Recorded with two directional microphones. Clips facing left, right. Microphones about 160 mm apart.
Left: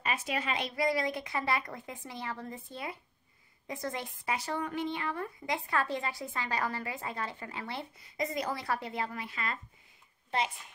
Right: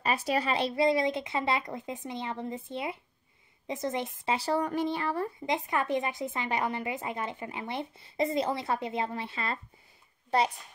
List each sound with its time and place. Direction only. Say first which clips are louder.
0.0 s a woman's voice: right 5 dB; 35° right (ahead or behind)
5.5 s a woman's voice: right 3 dB; 20° right (ahead or behind); by 10.5 s 40° right (ahead or behind)